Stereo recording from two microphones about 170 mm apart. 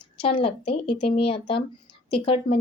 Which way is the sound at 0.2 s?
30° left (ahead or behind).